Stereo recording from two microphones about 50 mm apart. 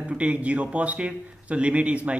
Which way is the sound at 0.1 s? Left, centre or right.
Right.